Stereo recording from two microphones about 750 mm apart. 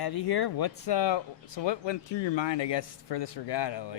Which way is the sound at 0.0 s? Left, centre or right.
Left.